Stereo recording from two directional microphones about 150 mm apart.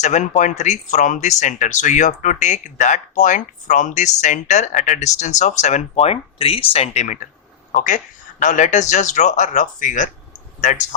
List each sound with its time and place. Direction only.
0.0 s speech: 50° left (ahead or behind)